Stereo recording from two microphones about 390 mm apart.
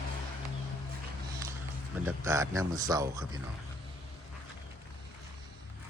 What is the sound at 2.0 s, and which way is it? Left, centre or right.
Speech, centre.